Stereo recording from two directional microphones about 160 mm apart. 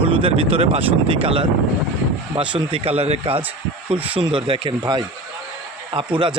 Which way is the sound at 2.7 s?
35° right (ahead or behind).